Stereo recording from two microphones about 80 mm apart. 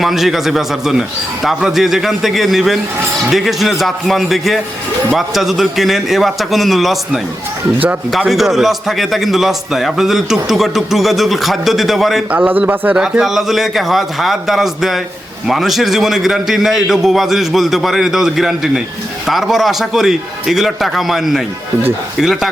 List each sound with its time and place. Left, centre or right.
0.0 s a man's voice: centre
8.3 s a man's voice: centre
12.3 s a man's voice: centre
12.9 s a man's voice: centre